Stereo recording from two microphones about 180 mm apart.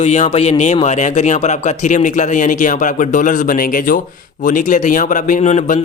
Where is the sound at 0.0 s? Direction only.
35° left (ahead or behind).